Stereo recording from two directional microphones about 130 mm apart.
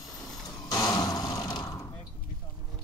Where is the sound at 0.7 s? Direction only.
30° left (ahead or behind).